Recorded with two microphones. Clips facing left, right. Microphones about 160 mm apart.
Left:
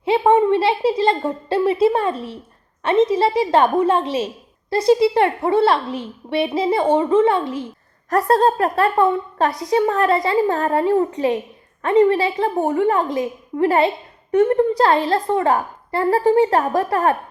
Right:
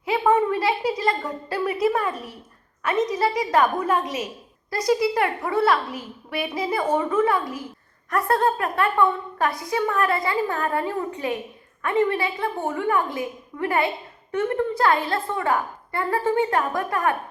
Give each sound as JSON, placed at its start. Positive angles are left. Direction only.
{"t": 0.0, "sound": "a woman's voice", "side_deg": 30}